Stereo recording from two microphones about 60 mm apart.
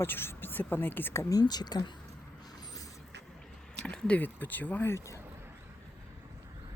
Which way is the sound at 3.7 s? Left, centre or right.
Centre.